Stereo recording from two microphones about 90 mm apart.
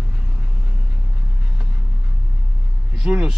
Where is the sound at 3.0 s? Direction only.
10° right (ahead or behind).